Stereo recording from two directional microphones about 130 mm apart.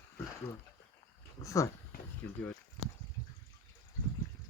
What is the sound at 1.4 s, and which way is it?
Speech, 25° left (ahead or behind).